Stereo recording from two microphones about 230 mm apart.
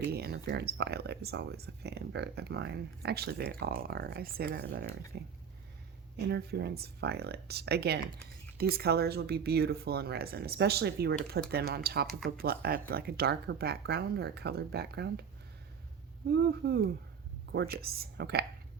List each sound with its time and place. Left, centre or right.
0.1 s speech: right
16.3 s speech: right